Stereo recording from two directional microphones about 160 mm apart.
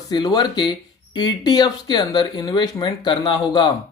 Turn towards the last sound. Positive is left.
turn(degrees=30)  # may be behind; listen again after turning